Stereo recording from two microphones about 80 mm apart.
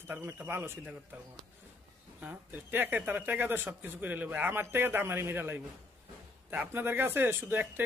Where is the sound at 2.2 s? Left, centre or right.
Right.